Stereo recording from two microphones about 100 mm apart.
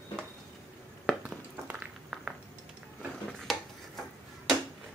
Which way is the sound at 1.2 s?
15° right (ahead or behind).